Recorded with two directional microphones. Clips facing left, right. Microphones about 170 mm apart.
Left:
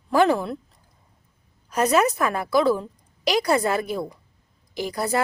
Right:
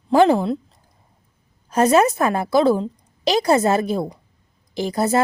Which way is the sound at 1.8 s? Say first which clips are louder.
Right 4 dB; 25° right (ahead or behind).